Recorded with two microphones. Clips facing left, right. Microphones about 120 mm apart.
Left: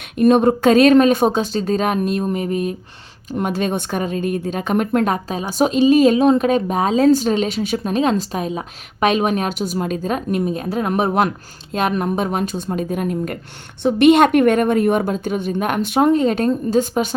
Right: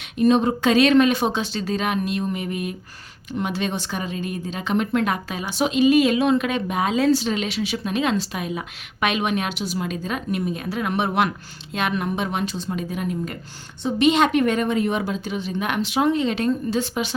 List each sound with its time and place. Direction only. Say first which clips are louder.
0.2 s a woman's voice: left 5 dB; 55° left (ahead or behind)